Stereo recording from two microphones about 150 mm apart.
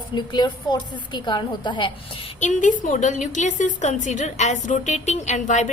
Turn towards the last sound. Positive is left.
turn(degrees=55)  # may be behind; listen again after turning